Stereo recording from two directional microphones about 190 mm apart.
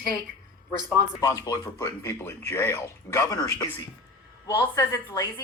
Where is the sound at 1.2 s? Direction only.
15° left (ahead or behind).